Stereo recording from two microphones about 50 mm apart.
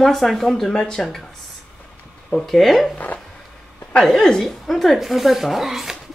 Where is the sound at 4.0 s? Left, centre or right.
Centre.